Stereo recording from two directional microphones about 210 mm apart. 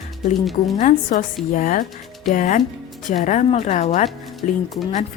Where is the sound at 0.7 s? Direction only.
35° left (ahead or behind).